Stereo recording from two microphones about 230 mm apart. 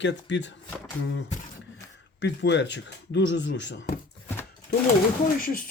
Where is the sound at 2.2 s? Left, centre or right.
Left.